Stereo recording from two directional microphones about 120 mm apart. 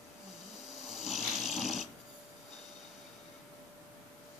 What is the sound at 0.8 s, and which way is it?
Snoring, 5° right (ahead or behind).